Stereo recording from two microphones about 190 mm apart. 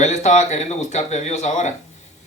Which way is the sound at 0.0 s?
35° left (ahead or behind).